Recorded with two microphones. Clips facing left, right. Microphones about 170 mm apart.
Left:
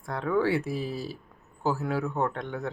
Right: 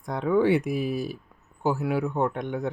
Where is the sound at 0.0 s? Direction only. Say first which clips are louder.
Right 4 dB; 15° right (ahead or behind).